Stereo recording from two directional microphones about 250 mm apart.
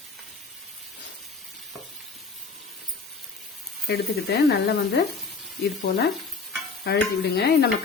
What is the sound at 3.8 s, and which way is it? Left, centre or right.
Speech, left.